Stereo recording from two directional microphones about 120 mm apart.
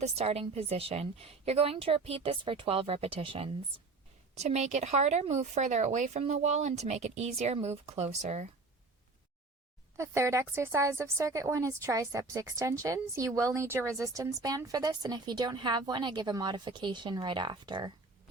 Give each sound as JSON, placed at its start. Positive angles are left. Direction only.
{"t": 0.0, "sound": "a woman's voice", "side_deg": -60}
{"t": 4.4, "sound": "speech", "side_deg": -65}
{"t": 10.0, "sound": "a woman's voice", "side_deg": -25}